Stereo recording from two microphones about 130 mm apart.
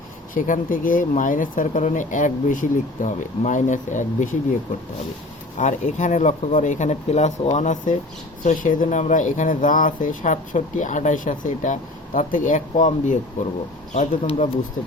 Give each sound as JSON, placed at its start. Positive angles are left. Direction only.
{"t": 0.3, "sound": "speech", "side_deg": 85}
{"t": 5.5, "sound": "speech", "side_deg": 70}
{"t": 8.4, "sound": "speech", "side_deg": 90}
{"t": 14.3, "sound": "speech", "side_deg": 55}